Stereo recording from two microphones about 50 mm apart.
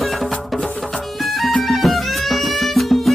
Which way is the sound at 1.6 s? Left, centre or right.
Centre.